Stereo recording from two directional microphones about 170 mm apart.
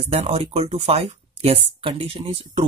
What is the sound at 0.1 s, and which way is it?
Speech, 40° right (ahead or behind).